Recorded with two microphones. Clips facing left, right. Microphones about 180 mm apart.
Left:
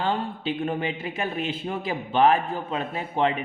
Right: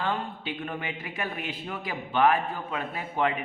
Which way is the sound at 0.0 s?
30° left (ahead or behind).